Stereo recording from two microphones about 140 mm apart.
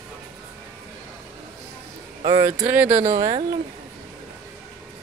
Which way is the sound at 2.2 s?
35° right (ahead or behind).